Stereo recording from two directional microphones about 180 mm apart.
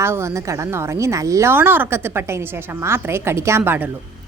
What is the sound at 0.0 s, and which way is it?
A woman's voice, 15° right (ahead or behind).